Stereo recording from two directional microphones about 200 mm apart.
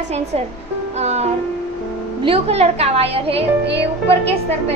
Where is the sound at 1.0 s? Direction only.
35° right (ahead or behind).